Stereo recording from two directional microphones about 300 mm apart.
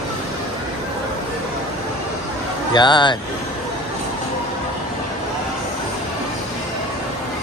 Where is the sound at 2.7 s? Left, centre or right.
Centre.